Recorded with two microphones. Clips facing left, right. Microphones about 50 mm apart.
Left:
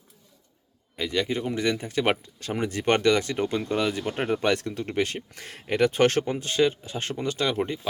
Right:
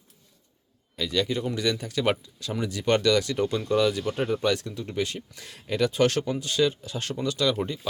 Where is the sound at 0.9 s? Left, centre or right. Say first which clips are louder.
Even; left.